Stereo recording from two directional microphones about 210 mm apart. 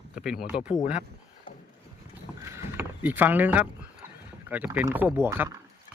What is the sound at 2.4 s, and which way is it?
Vehicle, 15° right (ahead or behind).